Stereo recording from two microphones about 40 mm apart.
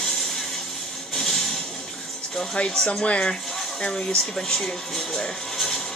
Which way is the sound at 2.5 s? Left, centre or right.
Left.